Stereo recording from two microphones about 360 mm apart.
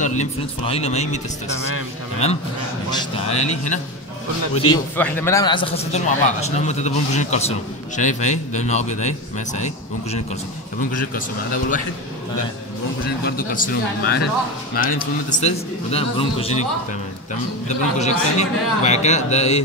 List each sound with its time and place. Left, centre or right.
0.0 s a man's voice: centre
3.0 s a man's voice: centre
4.6 s a man's voice: centre
13.0 s a man's voice: left
15.2 s a man's voice: centre
17.6 s a man's voice: centre